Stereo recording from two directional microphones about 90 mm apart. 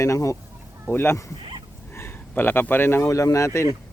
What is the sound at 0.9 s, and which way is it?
Speech, 25° left (ahead or behind).